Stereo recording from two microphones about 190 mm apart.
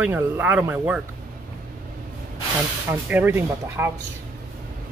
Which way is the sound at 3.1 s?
10° right (ahead or behind).